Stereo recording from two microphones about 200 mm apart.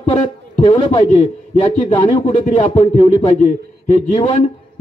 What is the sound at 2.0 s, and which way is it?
A man's voice, 35° left (ahead or behind).